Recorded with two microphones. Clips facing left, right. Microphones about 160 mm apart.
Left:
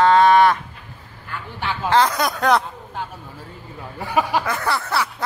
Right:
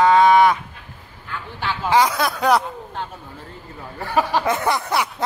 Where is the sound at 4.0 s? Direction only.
10° left (ahead or behind).